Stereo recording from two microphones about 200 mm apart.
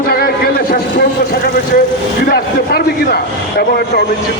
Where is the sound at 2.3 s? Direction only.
50° left (ahead or behind).